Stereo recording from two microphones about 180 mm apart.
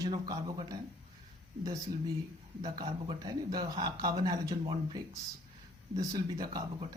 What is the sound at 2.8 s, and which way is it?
Speech, 30° right (ahead or behind).